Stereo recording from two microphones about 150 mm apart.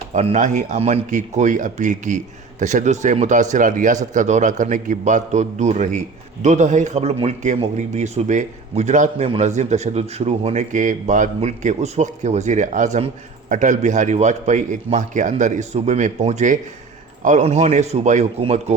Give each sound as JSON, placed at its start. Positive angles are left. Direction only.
{"t": 0.1, "sound": "a man's voice", "side_deg": -50}